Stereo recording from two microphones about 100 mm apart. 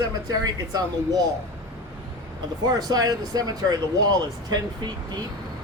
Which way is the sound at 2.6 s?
40° right (ahead or behind).